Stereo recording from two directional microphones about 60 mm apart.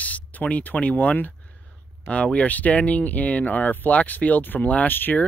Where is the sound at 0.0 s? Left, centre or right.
Left.